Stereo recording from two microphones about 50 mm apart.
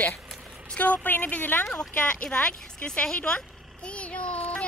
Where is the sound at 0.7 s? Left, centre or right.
Left.